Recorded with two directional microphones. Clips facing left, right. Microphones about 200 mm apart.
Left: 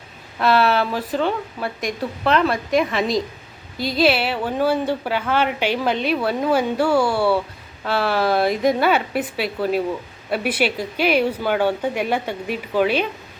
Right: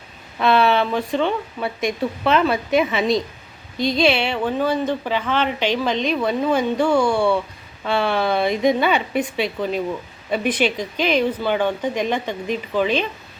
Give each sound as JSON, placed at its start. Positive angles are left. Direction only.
{"t": 0.3, "sound": "a woman's voice", "side_deg": 0}